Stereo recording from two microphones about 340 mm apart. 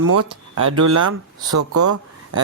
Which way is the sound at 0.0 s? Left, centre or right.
Right.